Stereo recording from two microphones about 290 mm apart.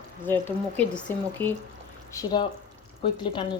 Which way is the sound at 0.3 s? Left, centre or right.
Centre.